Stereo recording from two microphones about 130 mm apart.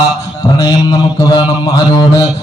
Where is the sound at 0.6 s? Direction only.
30° left (ahead or behind).